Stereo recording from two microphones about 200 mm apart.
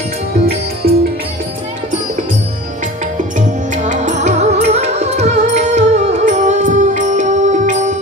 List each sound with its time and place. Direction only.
0.8 s music: 50° right (ahead or behind)
3.3 s music: 40° right (ahead or behind)